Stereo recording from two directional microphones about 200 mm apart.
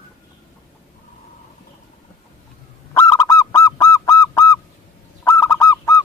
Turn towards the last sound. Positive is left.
turn(degrees=15)  # may be behind; listen again after turning